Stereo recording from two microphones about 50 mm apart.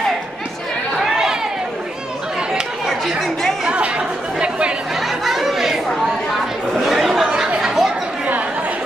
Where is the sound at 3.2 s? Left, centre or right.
Centre.